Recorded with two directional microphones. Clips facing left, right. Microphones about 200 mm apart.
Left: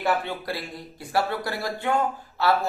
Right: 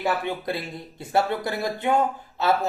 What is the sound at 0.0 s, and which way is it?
Speech, 20° right (ahead or behind).